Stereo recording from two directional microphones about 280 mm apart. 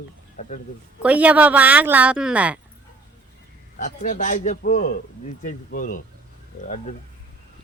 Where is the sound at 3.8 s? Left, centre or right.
Left.